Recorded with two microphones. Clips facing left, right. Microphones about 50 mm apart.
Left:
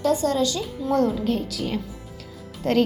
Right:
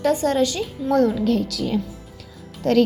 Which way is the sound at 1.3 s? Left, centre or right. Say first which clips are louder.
Right 4 dB; right.